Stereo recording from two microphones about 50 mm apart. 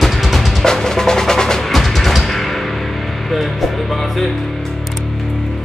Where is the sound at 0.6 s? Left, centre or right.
Centre.